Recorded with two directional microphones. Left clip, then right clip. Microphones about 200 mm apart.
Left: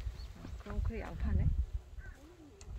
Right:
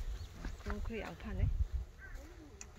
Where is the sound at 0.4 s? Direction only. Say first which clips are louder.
Right 2 dB; 25° left (ahead or behind).